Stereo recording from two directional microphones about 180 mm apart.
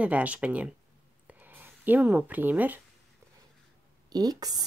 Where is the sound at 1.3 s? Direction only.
10° right (ahead or behind).